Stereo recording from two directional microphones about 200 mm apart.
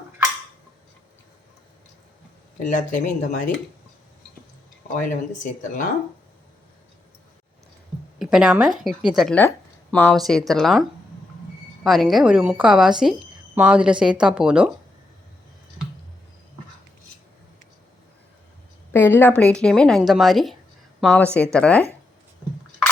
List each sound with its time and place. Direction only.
2.6 s speech: 40° left (ahead or behind)
4.9 s speech: 40° left (ahead or behind)
8.2 s a woman's voice: centre (ahead or behind)
18.9 s a woman's voice: 10° left (ahead or behind)